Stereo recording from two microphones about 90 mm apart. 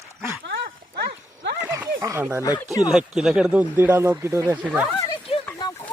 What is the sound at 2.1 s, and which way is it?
Speech, 30° right (ahead or behind).